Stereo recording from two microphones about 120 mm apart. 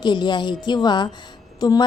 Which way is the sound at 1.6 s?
35° left (ahead or behind).